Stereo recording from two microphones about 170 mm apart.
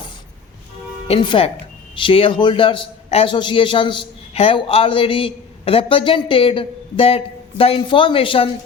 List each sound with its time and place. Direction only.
1.0 s a man's voice: 30° left (ahead or behind)